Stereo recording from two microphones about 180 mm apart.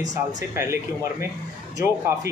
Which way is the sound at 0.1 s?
20° right (ahead or behind).